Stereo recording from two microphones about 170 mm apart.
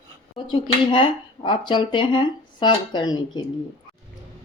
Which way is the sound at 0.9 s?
30° left (ahead or behind).